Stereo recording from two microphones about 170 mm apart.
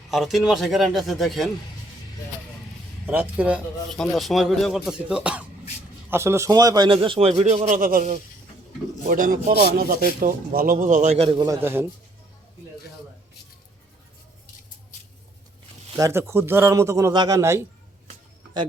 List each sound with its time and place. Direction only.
0.1 s speech: centre (ahead or behind)
3.1 s a man's voice: 10° right (ahead or behind); by 11.4 s 35° right (ahead or behind)
11.4 s speech: 15° right (ahead or behind)
16.0 s a man's voice: 15° right (ahead or behind)